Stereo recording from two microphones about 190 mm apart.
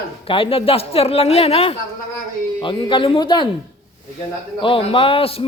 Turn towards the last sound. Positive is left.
turn(degrees=30)  # may be behind; listen again after turning